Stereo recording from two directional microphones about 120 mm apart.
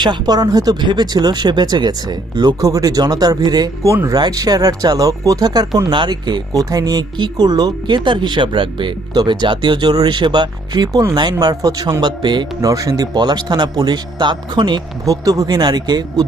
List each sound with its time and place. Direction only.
0.0 s speech: 35° right (ahead or behind)
3.9 s speech: 25° right (ahead or behind)